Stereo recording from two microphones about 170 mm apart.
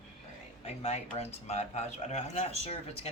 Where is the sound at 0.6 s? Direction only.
40° left (ahead or behind).